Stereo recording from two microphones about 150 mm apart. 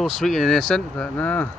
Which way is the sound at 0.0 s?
Centre (ahead or behind).